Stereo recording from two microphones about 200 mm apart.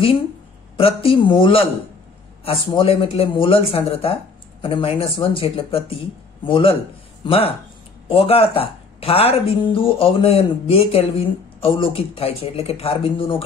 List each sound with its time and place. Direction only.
0.7 s speech: 30° left (ahead or behind)